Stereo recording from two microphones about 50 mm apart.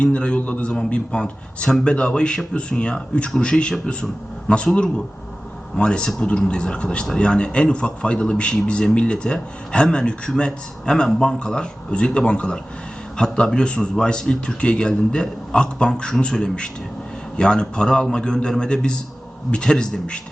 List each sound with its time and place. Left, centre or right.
0.0 s a man's voice: left